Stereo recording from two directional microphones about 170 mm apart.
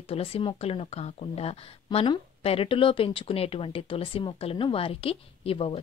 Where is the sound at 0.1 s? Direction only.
35° left (ahead or behind).